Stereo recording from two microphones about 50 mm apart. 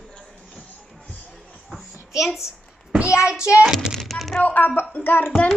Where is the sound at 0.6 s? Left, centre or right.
Left.